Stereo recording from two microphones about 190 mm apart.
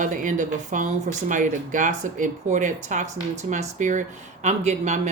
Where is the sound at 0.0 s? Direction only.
45° right (ahead or behind).